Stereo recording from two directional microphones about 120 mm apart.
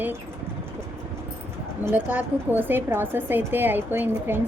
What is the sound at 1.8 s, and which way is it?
A woman's voice, 15° right (ahead or behind).